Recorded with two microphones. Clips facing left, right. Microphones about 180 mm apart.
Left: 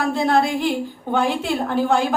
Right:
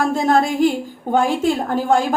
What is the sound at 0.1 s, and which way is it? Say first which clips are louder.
A woman's voice: right 2 dB; 45° right (ahead or behind).